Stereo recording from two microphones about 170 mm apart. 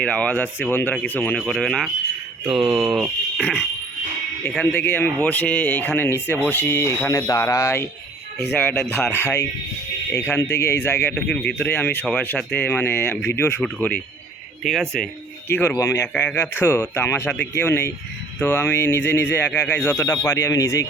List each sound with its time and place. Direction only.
0.0 s speech: 5° left (ahead or behind)
4.4 s speech: 5° left (ahead or behind)